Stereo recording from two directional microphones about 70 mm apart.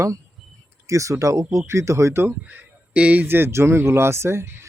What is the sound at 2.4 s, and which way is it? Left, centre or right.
Speech, right.